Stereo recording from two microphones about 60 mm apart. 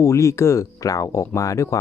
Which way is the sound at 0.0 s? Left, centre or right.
Left.